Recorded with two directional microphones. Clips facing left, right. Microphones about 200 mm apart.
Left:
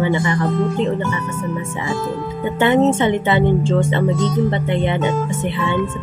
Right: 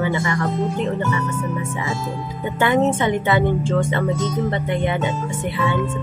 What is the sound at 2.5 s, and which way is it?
A woman's voice, 25° left (ahead or behind).